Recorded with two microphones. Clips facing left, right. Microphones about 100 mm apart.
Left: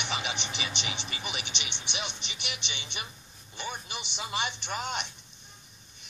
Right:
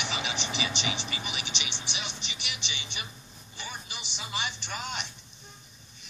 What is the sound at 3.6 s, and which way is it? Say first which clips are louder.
Speech: left 4 dB; 50° left (ahead or behind).